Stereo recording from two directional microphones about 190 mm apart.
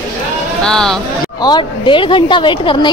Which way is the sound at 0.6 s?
5° left (ahead or behind).